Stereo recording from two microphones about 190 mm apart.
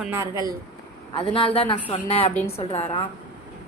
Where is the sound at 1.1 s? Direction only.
30° left (ahead or behind).